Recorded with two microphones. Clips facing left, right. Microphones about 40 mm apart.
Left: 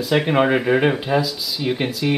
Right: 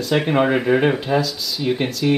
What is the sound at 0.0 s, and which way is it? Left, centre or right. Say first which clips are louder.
Speech: even; centre.